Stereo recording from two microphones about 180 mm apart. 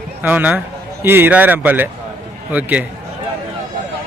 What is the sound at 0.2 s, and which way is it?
Speech, 10° right (ahead or behind).